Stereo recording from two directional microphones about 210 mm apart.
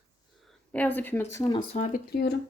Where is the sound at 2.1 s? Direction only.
50° left (ahead or behind).